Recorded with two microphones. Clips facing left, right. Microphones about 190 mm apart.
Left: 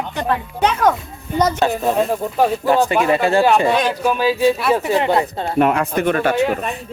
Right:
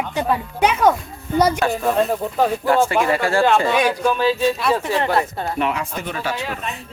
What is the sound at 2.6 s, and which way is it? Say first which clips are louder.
Speech: left 1 dB; 20° left (ahead or behind).